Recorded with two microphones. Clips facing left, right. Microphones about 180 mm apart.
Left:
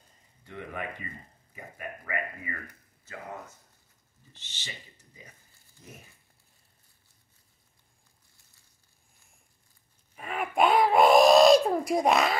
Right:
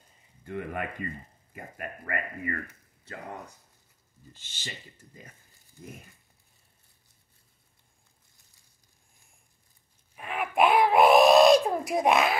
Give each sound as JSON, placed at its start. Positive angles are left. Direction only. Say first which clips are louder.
{"t": 0.5, "sound": "speech", "louder": "right 4 dB", "side_deg": -55}
{"t": 4.4, "sound": "speech", "louder": "right 3 dB", "side_deg": -50}
{"t": 10.1, "sound": "owl", "louder": "right 1 dB", "side_deg": 0}